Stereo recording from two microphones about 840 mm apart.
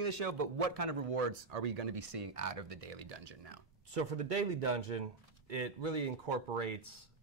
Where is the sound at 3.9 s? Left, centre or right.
Right.